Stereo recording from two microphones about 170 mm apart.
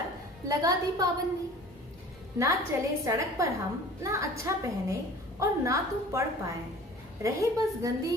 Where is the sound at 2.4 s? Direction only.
20° right (ahead or behind).